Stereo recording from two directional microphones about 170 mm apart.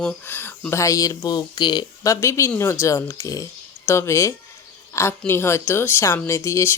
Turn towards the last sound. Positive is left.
turn(degrees=15)  # may be behind; listen again after turning